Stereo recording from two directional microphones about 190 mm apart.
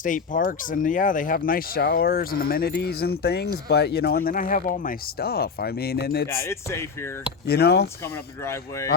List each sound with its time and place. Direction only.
0.0 s speech: 45° left (ahead or behind)
6.2 s speech: 15° left (ahead or behind)
7.4 s speech: 55° left (ahead or behind)
8.4 s speech: 15° left (ahead or behind)